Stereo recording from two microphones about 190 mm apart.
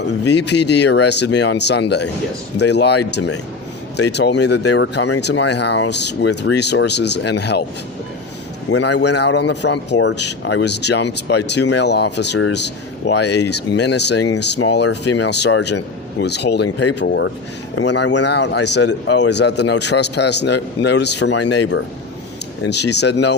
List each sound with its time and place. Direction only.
0.3 s speech: 65° left (ahead or behind)
8.8 s speech: 65° left (ahead or behind)